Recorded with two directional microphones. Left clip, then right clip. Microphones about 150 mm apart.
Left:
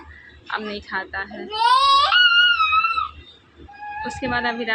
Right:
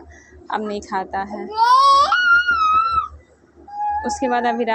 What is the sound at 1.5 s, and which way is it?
Baby cry, 60° right (ahead or behind).